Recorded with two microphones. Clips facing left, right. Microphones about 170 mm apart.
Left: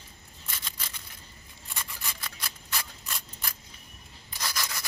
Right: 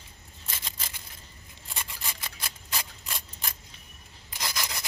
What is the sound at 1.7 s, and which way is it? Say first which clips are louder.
Rub: right 1 dB; 25° right (ahead or behind).